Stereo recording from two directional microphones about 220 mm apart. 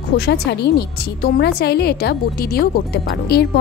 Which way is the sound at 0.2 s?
50° left (ahead or behind).